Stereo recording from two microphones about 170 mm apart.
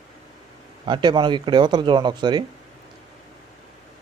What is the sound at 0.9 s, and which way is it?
Speech, 25° right (ahead or behind).